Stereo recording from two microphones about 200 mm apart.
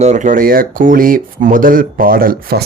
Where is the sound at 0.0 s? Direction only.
35° right (ahead or behind).